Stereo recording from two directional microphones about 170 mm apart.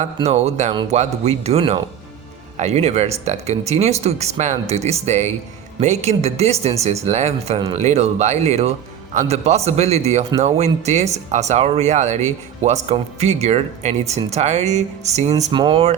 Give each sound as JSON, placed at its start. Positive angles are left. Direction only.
{"t": 0.3, "sound": "speech", "side_deg": -40}
{"t": 15.5, "sound": "speech", "side_deg": -30}